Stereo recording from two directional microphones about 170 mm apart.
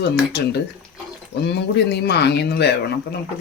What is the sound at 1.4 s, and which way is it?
Speech, 80° left.